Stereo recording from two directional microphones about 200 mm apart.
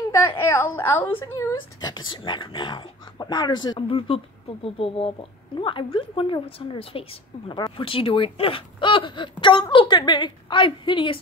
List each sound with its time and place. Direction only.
0.4 s a woman's voice: 10° left (ahead or behind)